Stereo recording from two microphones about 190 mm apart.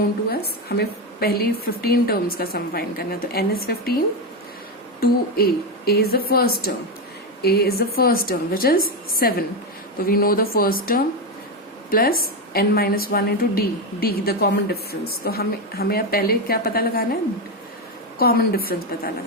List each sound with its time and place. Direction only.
0.3 s a woman's voice: 55° left (ahead or behind)
4.9 s a woman's voice: 55° left (ahead or behind)
18.2 s a woman's voice: 55° left (ahead or behind)